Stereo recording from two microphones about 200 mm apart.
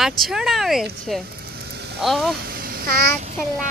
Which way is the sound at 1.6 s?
55° right (ahead or behind).